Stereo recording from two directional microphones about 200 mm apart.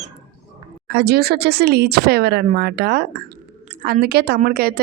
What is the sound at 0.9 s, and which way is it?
A woman's voice, 50° right (ahead or behind).